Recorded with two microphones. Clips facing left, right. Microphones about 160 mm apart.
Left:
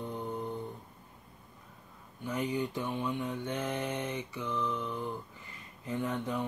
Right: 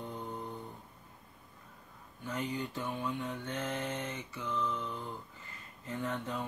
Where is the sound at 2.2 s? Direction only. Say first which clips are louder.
Left 4 dB; 15° left (ahead or behind).